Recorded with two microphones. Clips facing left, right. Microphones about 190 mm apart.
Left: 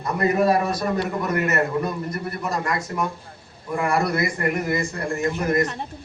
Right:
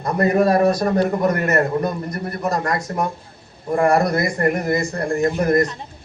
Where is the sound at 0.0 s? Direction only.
40° right (ahead or behind).